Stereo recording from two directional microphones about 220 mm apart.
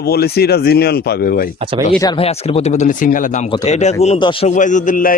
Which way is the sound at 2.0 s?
25° left (ahead or behind).